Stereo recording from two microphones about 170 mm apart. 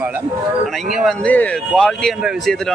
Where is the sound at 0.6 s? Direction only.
Centre (ahead or behind).